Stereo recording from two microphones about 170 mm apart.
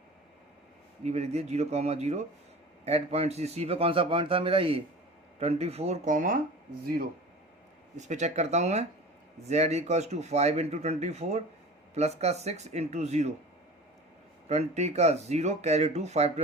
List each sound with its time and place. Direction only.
1.0 s speech: 40° right (ahead or behind); by 7.1 s 60° right (ahead or behind)
7.9 s speech: 45° right (ahead or behind)
14.4 s speech: 40° right (ahead or behind)